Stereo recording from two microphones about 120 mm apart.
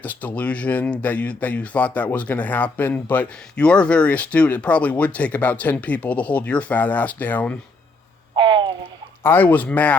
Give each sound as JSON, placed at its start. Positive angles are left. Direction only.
{"t": 0.0, "sound": "speech", "side_deg": 15}
{"t": 8.4, "sound": "a sound", "side_deg": -45}
{"t": 9.2, "sound": "speech", "side_deg": 15}